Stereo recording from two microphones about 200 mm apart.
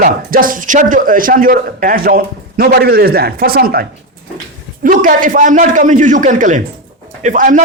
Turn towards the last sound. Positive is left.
turn(degrees=-40)  # may be behind; listen again after turning